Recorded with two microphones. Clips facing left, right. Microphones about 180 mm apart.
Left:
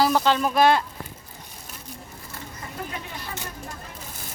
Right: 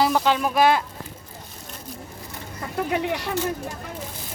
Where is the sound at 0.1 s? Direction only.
10° right (ahead or behind).